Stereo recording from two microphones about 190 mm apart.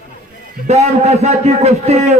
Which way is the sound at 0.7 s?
35° right (ahead or behind).